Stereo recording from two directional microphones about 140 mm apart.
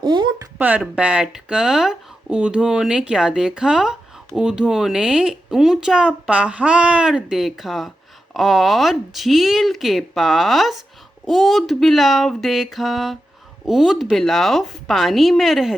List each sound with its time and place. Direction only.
0.0 s speech: 35° right (ahead or behind)
0.6 s speech: 10° right (ahead or behind)